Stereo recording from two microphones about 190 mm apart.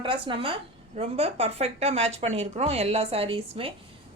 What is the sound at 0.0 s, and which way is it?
A woman's voice, 25° right (ahead or behind).